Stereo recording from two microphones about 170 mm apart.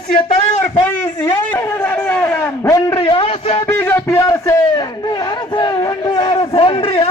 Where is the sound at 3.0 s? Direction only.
30° left (ahead or behind).